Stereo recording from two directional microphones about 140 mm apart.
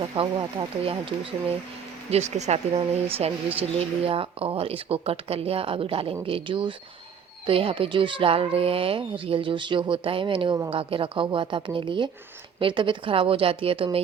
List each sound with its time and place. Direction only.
0.0 s speech: 35° right (ahead or behind)